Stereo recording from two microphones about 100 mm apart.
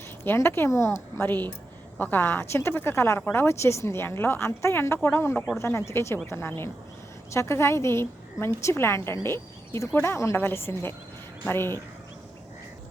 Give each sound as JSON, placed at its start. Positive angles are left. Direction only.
{"t": 0.3, "sound": "a woman's voice", "side_deg": 25}